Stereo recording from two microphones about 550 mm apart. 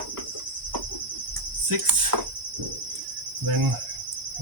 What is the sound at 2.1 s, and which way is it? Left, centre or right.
Cricket, right.